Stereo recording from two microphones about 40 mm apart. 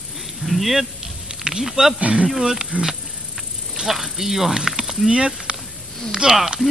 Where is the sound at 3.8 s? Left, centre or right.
Centre.